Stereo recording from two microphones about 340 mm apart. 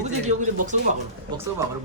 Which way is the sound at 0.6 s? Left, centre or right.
Right.